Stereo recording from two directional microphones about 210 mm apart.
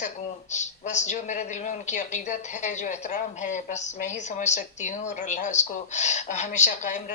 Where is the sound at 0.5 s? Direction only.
35° left (ahead or behind).